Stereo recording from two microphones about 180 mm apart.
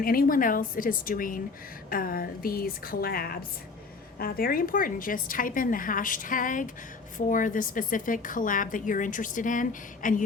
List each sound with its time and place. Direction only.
0.0 s a woman's voice: 55° left (ahead or behind)